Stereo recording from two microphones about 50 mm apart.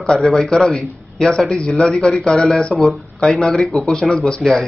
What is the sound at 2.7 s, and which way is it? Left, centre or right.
Speech, centre.